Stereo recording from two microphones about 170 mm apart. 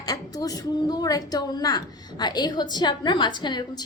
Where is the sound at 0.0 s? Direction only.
20° left (ahead or behind).